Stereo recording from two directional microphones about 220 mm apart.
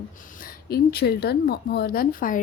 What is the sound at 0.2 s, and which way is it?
A woman's voice, 40° left (ahead or behind).